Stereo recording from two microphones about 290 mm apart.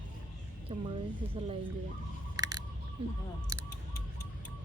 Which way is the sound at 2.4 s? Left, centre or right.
Centre.